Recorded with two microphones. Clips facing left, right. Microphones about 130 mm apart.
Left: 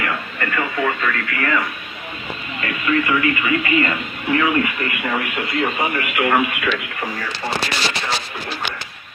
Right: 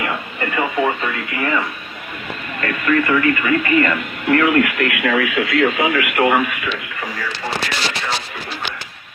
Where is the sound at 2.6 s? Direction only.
50° right (ahead or behind); by 6.1 s 85° right.